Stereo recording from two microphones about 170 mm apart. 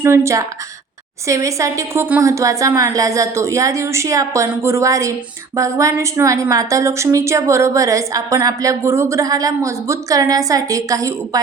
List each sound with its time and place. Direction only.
0.0 s a woman's voice: 15° right (ahead or behind)